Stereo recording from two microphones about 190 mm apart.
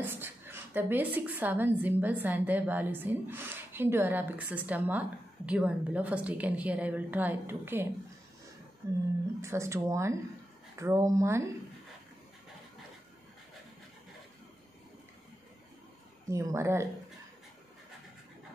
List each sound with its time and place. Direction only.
0.0 s a woman's voice: 10° right (ahead or behind)
16.3 s a woman's voice: 15° right (ahead or behind)